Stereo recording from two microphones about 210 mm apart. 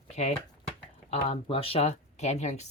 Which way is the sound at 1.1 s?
25° left (ahead or behind).